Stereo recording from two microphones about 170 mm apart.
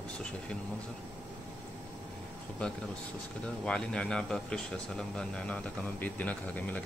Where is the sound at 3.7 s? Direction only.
5° left (ahead or behind).